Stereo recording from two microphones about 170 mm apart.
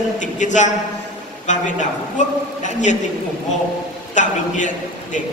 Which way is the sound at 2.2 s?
45° left (ahead or behind).